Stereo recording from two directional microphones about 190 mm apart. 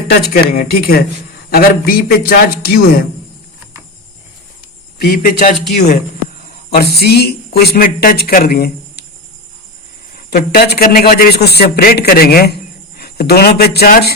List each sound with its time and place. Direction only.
0.1 s a man's voice: 50° left (ahead or behind)
4.9 s a man's voice: 50° left (ahead or behind)
10.2 s a man's voice: 55° left (ahead or behind)